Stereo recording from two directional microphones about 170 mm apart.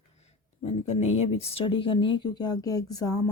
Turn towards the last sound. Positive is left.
turn(degrees=20)  # may be behind; listen again after turning